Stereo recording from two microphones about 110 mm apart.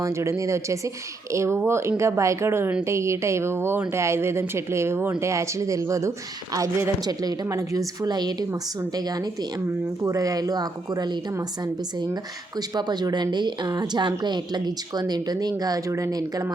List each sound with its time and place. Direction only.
0.0 s a woman's voice: 25° right (ahead or behind)
8.0 s a woman's voice: 40° right (ahead or behind)